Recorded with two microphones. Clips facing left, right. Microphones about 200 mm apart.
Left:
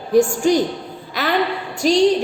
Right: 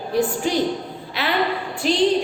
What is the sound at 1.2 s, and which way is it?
Speech, 40° left (ahead or behind).